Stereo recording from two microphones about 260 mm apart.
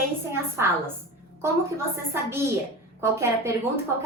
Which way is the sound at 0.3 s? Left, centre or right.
Centre.